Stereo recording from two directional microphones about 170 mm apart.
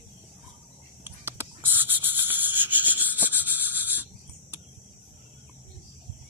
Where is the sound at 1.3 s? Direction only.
15° right (ahead or behind).